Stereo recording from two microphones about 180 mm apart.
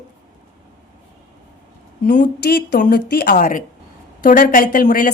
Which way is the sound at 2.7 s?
55° left (ahead or behind).